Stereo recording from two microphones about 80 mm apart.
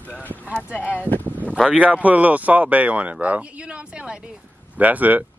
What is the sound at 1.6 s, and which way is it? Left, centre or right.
Speech, centre.